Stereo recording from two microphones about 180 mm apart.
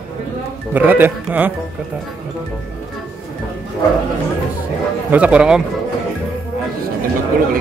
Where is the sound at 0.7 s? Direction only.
10° right (ahead or behind).